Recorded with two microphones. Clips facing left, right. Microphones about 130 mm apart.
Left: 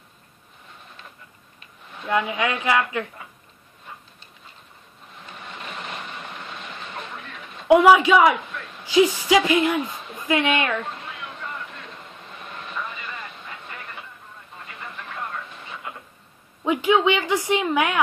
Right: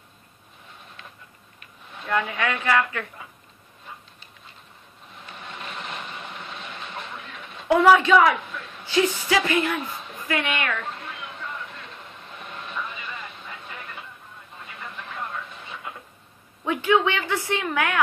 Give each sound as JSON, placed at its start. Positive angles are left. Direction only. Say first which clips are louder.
{"t": 2.0, "sound": "a woman's voice", "louder": "left 2 dB", "side_deg": 15}
{"t": 7.6, "sound": "a woman's voice", "louder": "left 3 dB", "side_deg": 15}
{"t": 16.6, "sound": "a woman's voice", "louder": "left 2 dB", "side_deg": 15}